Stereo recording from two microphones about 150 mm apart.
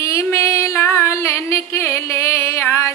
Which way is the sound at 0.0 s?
20° left (ahead or behind).